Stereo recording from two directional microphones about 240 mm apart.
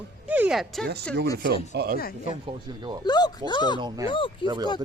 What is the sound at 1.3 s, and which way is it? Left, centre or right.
Speech, right.